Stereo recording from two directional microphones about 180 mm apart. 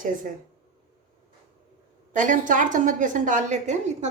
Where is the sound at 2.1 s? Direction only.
45° right (ahead or behind).